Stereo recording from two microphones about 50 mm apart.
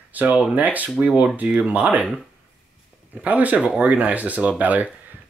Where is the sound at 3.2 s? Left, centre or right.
Right.